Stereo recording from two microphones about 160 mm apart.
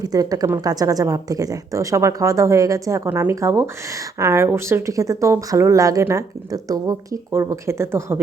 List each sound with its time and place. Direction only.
0.0 s a woman's voice: 25° right (ahead or behind)